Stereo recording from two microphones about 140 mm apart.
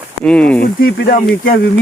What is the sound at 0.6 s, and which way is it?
Speech, 90° left.